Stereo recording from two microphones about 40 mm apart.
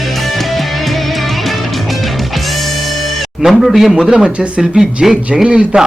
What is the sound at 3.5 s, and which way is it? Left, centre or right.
A man's voice, centre.